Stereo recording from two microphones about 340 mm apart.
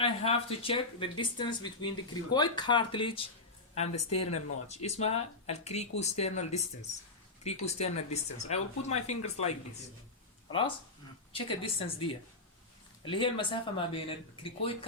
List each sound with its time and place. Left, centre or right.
0.0 s speech: centre
3.9 s speech: left
4.9 s speech: centre
11.3 s speech: centre
13.1 s speech: centre